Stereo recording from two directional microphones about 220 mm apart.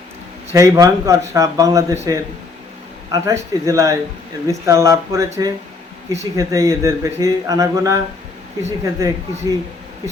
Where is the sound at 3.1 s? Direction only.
15° right (ahead or behind).